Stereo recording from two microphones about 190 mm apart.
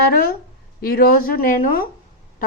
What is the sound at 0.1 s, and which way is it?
A woman's voice, 50° left (ahead or behind).